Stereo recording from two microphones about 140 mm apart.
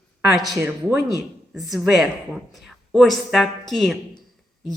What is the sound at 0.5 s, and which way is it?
Speech, 20° right (ahead or behind).